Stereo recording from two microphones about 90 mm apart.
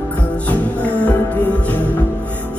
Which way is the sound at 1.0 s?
20° left (ahead or behind).